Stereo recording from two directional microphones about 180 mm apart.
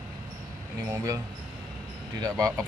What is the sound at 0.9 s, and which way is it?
Speech, 15° right (ahead or behind).